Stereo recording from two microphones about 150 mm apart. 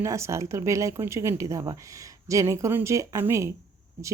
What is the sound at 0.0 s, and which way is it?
Speech, 20° right (ahead or behind).